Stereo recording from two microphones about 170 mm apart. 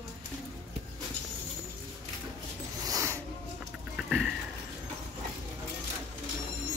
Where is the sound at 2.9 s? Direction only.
15° right (ahead or behind).